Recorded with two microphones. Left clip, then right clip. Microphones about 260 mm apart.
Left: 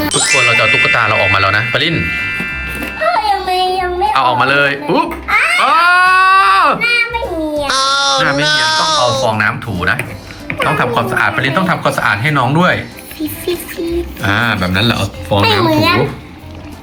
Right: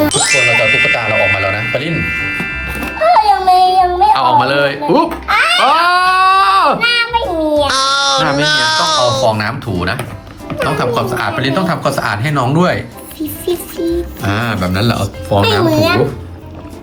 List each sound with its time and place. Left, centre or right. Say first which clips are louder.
0.1 s music: even; centre
3.7 s baby cry: right 5 dB; centre
7.5 s a sound: even; centre
9.2 s speech: left 1 dB; centre
14.2 s speech: left 3 dB; centre